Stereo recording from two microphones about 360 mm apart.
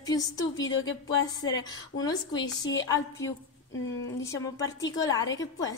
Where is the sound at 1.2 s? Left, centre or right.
Centre.